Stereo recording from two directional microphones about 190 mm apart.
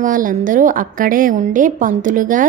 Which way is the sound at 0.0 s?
45° right (ahead or behind).